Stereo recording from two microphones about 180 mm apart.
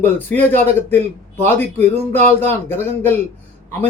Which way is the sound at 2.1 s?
40° right (ahead or behind).